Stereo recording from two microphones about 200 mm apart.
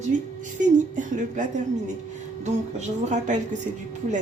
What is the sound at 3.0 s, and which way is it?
Speech, 40° right (ahead or behind).